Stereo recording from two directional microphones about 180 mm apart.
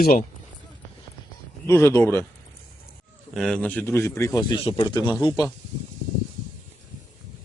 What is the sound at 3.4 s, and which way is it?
A man's voice, 5° left (ahead or behind).